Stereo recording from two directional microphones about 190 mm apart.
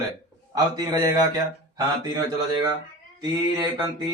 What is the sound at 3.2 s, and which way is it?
Speech, 20° right (ahead or behind).